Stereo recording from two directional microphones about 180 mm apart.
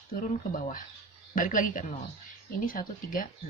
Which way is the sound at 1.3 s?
50° left (ahead or behind).